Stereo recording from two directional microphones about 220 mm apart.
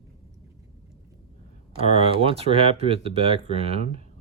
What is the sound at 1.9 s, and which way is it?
Speech, 25° right (ahead or behind).